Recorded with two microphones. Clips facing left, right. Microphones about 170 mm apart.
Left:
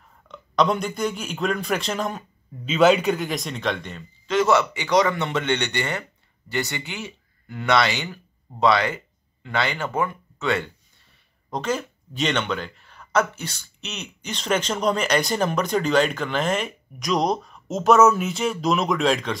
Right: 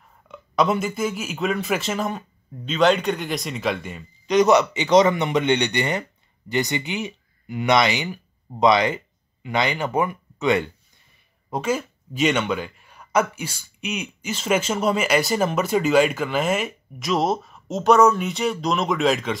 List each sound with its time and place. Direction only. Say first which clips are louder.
0.3 s speech: even; 5° right (ahead or behind)